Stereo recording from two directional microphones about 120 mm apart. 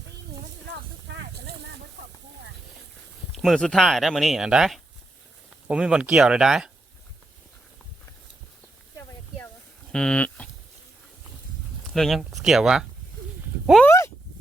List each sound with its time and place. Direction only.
3.3 s speech: centre (ahead or behind)
9.9 s speech: 10° left (ahead or behind)
11.9 s speech: centre (ahead or behind)
13.8 s speech: 25° left (ahead or behind)